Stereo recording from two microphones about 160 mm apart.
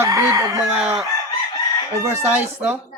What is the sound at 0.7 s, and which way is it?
Fowl, 5° right (ahead or behind).